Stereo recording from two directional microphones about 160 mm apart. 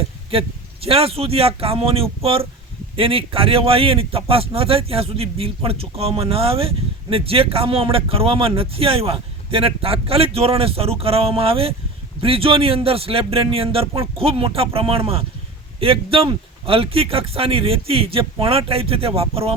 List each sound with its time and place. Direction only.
0.3 s a man's voice: 35° right (ahead or behind)